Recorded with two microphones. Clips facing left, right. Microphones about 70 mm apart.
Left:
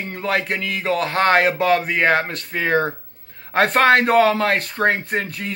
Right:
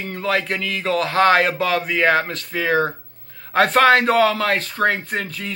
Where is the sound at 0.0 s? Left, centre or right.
Left.